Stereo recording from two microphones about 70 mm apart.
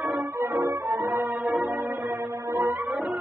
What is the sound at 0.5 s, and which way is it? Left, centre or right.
Music, right.